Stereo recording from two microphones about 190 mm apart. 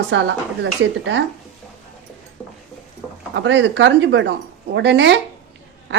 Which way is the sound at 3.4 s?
75° right (ahead or behind).